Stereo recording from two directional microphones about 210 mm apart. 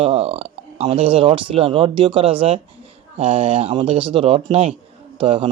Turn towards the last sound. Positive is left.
turn(degrees=-25)  # may be behind; listen again after turning